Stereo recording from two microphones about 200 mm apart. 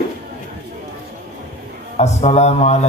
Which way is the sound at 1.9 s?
35° left (ahead or behind).